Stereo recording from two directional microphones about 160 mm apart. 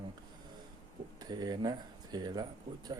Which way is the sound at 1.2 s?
25° right (ahead or behind).